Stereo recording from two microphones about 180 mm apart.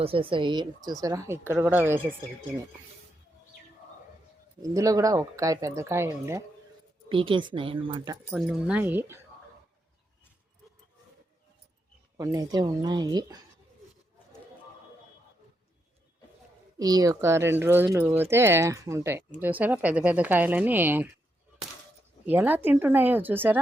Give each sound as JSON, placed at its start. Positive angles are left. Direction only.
{"t": 0.0, "sound": "speech", "side_deg": -30}
{"t": 4.6, "sound": "speech", "side_deg": -20}
{"t": 7.1, "sound": "speech", "side_deg": -30}
{"t": 8.3, "sound": "speech", "side_deg": -5}
{"t": 12.1, "sound": "speech", "side_deg": -20}
{"t": 16.7, "sound": "speech", "side_deg": -20}
{"t": 22.3, "sound": "speech", "side_deg": -10}